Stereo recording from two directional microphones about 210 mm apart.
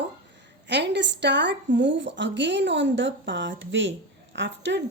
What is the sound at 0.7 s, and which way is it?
A woman's voice, 55° right (ahead or behind).